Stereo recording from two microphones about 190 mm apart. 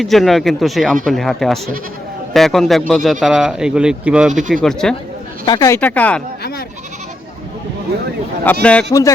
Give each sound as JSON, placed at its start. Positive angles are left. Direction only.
{"t": 0.0, "sound": "speech", "side_deg": 0}
{"t": 4.3, "sound": "speech", "side_deg": -40}
{"t": 4.6, "sound": "speech", "side_deg": 5}
{"t": 5.5, "sound": "speech", "side_deg": 20}
{"t": 8.5, "sound": "speech", "side_deg": 10}